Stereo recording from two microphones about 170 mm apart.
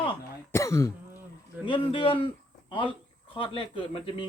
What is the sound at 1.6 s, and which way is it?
A man's voice, 30° left (ahead or behind).